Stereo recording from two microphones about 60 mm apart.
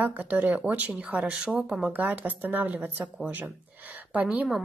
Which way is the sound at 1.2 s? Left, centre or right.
Centre.